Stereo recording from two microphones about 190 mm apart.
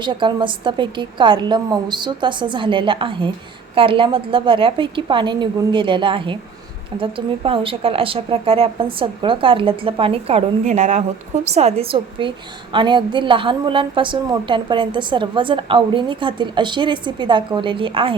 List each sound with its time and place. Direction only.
0.0 s a woman's voice: 25° right (ahead or behind)